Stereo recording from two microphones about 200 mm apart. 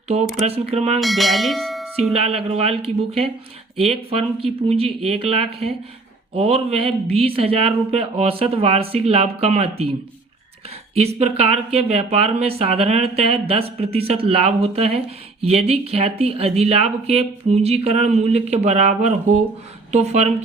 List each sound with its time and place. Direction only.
0.4 s speech: 30° right (ahead or behind)
0.9 s speech: centre (ahead or behind)
2.2 s speech: 30° right (ahead or behind)
10.9 s speech: 30° right (ahead or behind)